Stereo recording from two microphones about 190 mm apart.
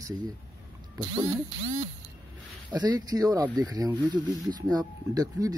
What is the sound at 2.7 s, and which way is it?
Speech, 20° right (ahead or behind).